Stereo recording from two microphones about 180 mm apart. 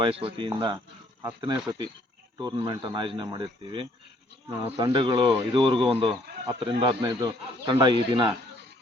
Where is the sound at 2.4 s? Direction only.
25° right (ahead or behind).